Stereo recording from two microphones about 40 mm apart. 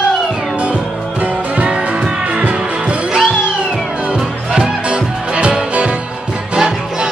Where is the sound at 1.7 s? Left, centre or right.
Right.